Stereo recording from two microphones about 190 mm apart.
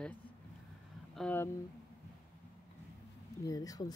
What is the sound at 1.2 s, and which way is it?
Speech, 10° left (ahead or behind).